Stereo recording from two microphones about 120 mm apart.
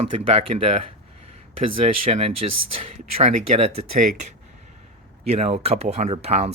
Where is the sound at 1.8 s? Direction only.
60° right (ahead or behind).